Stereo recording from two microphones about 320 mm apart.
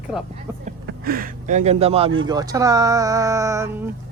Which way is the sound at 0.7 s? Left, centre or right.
Right.